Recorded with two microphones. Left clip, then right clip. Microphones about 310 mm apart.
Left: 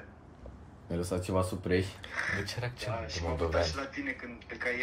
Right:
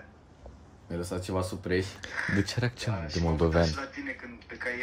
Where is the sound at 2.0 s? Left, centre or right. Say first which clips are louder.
Right 3 dB; right.